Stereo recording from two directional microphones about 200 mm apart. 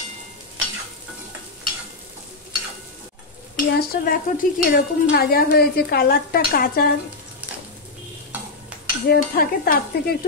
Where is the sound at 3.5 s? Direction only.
45° left (ahead or behind).